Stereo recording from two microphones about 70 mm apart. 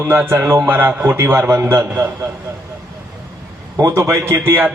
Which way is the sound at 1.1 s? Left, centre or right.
Right.